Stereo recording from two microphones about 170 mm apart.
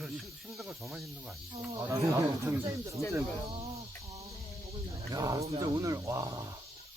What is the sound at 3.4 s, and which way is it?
Speech, 35° right (ahead or behind).